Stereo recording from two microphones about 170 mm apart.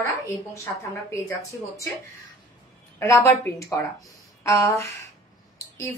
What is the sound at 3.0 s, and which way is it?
A woman's voice, 15° left (ahead or behind).